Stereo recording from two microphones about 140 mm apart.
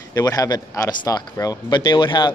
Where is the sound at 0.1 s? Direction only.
25° left (ahead or behind).